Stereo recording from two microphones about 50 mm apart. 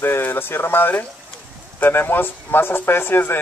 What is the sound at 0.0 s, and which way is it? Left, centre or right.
A man's voice, left.